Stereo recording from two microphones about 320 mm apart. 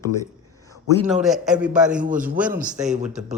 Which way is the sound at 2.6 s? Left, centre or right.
Right.